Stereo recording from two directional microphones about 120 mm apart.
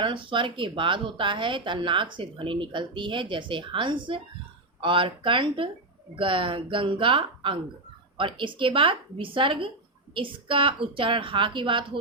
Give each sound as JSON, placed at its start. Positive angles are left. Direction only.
{"t": 0.0, "sound": "speech", "side_deg": -45}